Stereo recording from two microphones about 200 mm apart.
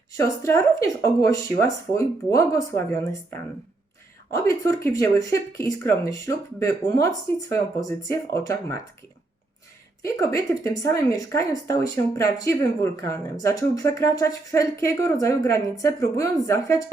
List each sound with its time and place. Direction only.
0.1 s speech: 15° left (ahead or behind)
4.3 s speech: 15° left (ahead or behind)
10.2 s speech: 15° left (ahead or behind)